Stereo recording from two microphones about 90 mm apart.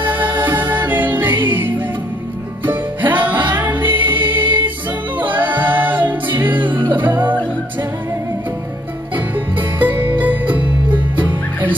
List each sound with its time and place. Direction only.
0.0 s music: 20° right (ahead or behind)
4.4 s music: 65° right (ahead or behind)
5.3 s a capella: 20° right (ahead or behind)
6.4 s music: 20° right (ahead or behind)
9.1 s music: 20° right (ahead or behind)